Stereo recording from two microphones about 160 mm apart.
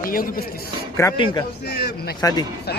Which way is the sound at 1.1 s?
30° left (ahead or behind).